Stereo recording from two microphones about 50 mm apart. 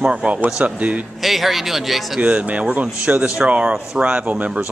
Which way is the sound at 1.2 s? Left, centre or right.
Centre.